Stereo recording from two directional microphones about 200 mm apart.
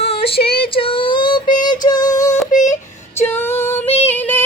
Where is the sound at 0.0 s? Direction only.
30° left (ahead or behind).